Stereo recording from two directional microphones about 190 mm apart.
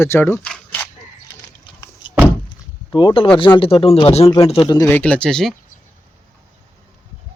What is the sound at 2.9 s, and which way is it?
A man's voice, 25° left (ahead or behind).